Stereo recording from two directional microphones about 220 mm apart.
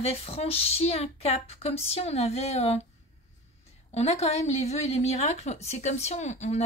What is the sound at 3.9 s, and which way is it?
Speech, 30° left (ahead or behind).